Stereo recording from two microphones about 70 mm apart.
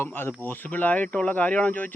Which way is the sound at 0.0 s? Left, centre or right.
Left.